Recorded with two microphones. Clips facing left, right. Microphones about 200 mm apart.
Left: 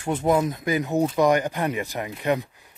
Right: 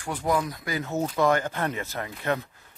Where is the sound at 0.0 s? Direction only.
25° left (ahead or behind).